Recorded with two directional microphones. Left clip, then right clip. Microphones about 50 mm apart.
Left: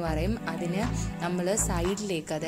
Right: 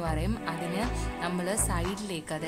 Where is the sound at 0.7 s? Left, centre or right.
Centre.